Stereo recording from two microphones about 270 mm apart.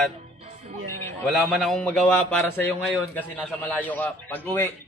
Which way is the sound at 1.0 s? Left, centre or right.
Centre.